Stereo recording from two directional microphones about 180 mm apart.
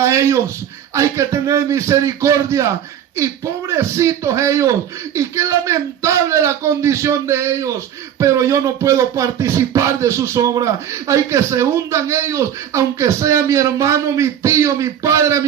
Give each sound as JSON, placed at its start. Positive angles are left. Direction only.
{"t": 0.0, "sound": "speech", "side_deg": -15}